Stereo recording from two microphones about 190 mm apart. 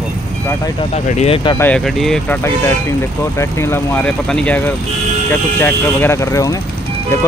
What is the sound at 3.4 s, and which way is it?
Speech, 10° left (ahead or behind).